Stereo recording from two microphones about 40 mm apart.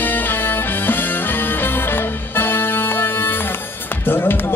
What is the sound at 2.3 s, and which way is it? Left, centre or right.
Music, left.